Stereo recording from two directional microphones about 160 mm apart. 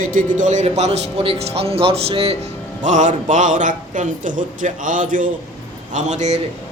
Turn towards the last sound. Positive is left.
turn(degrees=-50)  # may be behind; listen again after turning